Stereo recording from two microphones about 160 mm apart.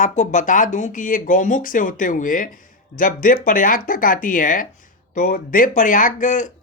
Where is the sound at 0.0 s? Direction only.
50° left (ahead or behind).